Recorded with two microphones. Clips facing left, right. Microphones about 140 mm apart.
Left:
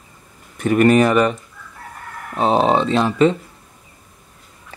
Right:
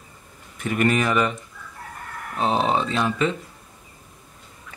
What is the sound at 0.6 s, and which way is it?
Speech, 45° left (ahead or behind).